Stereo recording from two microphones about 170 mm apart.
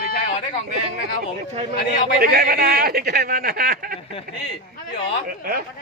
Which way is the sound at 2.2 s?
65° right (ahead or behind).